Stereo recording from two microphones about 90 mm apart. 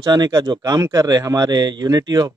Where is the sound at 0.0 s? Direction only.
50° right (ahead or behind).